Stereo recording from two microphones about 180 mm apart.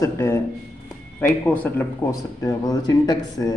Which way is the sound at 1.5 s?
10° left (ahead or behind).